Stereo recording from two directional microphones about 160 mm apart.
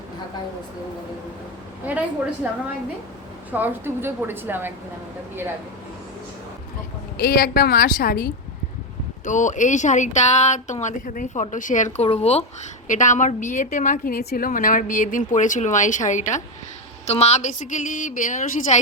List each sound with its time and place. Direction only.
1.9 s a woman's voice: 10° right (ahead or behind)
3.5 s a woman's voice: 10° right (ahead or behind)
7.2 s a woman's voice: 70° left (ahead or behind)
9.2 s a woman's voice: 50° left (ahead or behind)
12.0 s a woman's voice: 40° left (ahead or behind)